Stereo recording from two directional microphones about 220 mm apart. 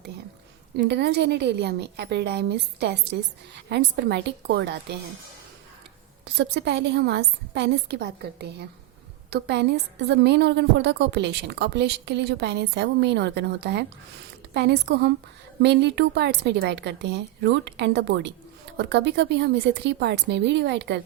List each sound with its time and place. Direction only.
0.9 s a woman's voice: 50° right (ahead or behind)
6.3 s a woman's voice: 50° right (ahead or behind)